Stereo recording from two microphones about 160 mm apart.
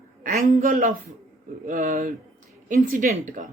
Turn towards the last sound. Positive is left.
turn(degrees=-55)  # may be behind; listen again after turning